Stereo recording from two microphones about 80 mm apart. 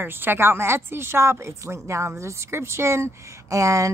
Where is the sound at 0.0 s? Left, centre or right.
Right.